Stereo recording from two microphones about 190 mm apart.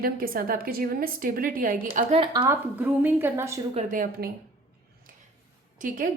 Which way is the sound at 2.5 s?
10° right (ahead or behind).